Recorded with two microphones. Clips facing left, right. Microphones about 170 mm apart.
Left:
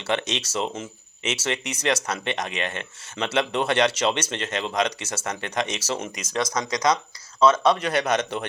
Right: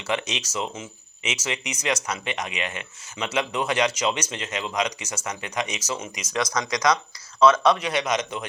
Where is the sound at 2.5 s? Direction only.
50° left (ahead or behind).